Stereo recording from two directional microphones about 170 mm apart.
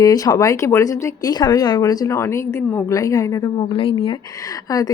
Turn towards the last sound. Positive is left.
turn(degrees=20)  # may be behind; listen again after turning